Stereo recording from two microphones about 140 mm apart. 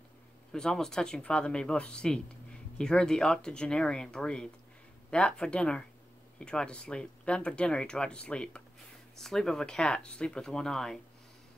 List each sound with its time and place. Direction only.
0.5 s speech: 5° left (ahead or behind)